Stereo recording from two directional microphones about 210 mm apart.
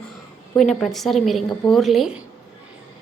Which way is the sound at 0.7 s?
Centre (ahead or behind).